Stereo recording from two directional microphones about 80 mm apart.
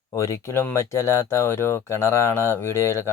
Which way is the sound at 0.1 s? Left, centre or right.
Left.